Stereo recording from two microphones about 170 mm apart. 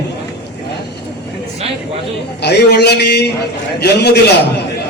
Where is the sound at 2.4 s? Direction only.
75° left (ahead or behind).